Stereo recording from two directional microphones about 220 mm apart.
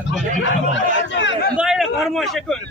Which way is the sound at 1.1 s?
55° left (ahead or behind).